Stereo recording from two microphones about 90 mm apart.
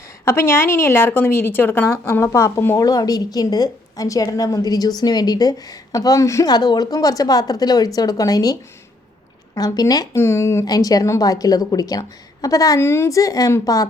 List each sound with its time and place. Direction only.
0.3 s a woman's voice: 25° left (ahead or behind)
2.8 s a woman's voice: 45° left (ahead or behind)
6.5 s a woman's voice: 50° left (ahead or behind)
9.6 s a woman's voice: 45° left (ahead or behind)
10.2 s a woman's voice: 30° left (ahead or behind)
10.7 s a woman's voice: 40° left (ahead or behind)
12.8 s a woman's voice: 30° left (ahead or behind)